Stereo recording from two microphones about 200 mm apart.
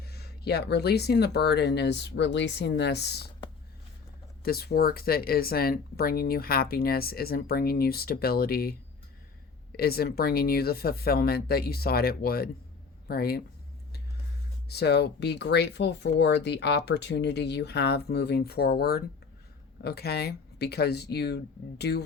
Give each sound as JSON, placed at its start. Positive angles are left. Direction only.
{"t": 0.0, "sound": "speech", "side_deg": 55}
{"t": 4.4, "sound": "speech", "side_deg": 50}
{"t": 9.7, "sound": "speech", "side_deg": 50}
{"t": 14.7, "sound": "speech", "side_deg": 55}